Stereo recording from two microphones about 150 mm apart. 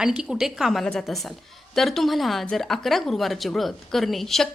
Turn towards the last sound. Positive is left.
turn(degrees=0)  # may be behind; listen again after turning